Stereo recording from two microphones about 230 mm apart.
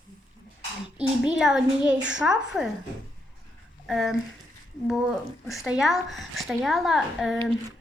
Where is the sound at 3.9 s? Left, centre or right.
Centre.